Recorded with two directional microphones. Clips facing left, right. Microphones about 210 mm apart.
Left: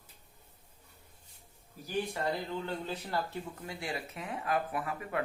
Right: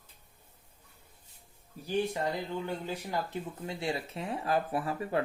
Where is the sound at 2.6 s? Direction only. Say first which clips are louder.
Right 2 dB; 15° right (ahead or behind); by 5.2 s 30° right (ahead or behind).